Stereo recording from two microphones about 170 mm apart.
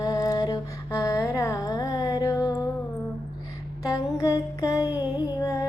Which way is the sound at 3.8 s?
20° left (ahead or behind).